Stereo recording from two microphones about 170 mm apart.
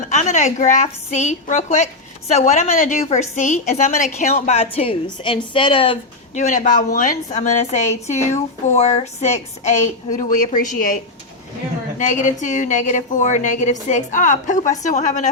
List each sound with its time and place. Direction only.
0.1 s a woman's voice: 45° left (ahead or behind)
6.3 s a woman's voice: 45° left (ahead or behind)